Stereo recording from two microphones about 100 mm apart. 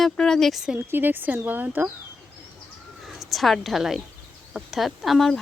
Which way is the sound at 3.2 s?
Centre (ahead or behind).